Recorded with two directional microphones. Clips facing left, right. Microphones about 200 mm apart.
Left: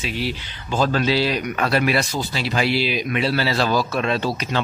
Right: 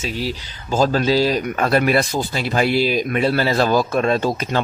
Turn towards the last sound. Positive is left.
turn(degrees=-45)  # may be behind; listen again after turning